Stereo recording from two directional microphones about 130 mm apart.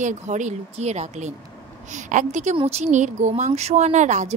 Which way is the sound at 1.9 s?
70° right (ahead or behind).